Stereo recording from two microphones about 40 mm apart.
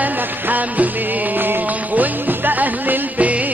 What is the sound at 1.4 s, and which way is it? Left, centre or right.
Music, right.